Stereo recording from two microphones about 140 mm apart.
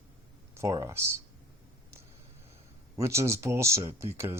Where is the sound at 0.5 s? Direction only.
25° right (ahead or behind).